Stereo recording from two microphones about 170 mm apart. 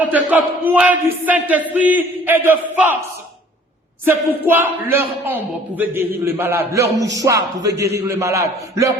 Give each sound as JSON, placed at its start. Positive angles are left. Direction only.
{"t": 0.0, "sound": "speech", "side_deg": -10}
{"t": 4.0, "sound": "speech", "side_deg": -10}
{"t": 6.9, "sound": "music", "side_deg": -20}
{"t": 7.8, "sound": "speech", "side_deg": -15}